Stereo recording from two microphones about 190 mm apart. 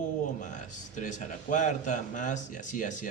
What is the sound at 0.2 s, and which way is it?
A man's voice, 40° left (ahead or behind).